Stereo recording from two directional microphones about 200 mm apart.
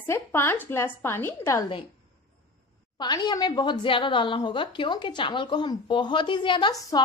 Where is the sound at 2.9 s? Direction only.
20° left (ahead or behind).